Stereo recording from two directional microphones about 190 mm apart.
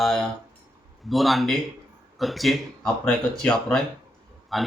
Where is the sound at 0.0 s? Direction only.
Centre (ahead or behind).